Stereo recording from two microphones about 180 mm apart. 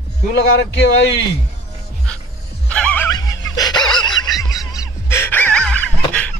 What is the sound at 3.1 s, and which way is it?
Music, 20° left (ahead or behind).